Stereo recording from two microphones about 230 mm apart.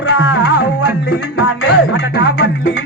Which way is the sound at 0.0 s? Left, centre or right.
Left.